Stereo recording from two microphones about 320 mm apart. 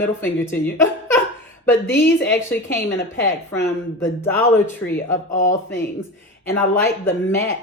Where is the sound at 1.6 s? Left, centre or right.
Centre.